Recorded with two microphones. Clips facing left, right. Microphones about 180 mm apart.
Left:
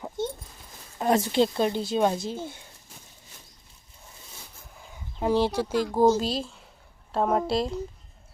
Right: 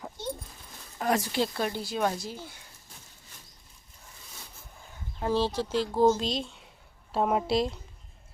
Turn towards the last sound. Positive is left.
turn(degrees=0)  # may be behind; listen again after turning